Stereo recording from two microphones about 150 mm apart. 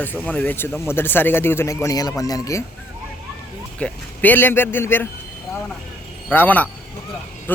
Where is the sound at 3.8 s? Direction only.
10° left (ahead or behind).